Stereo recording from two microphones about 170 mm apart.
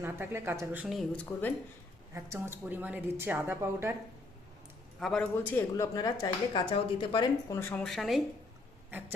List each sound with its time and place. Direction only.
0.0 s speech: 15° right (ahead or behind); by 1.5 s 10° left (ahead or behind)
2.1 s speech: 15° right (ahead or behind)
4.9 s speech: 5° left (ahead or behind); by 7.3 s 25° left (ahead or behind)
7.5 s speech: 10° left (ahead or behind)
8.9 s a sound: 10° right (ahead or behind)